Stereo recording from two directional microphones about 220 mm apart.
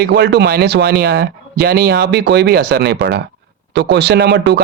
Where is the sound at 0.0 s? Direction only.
45° right (ahead or behind).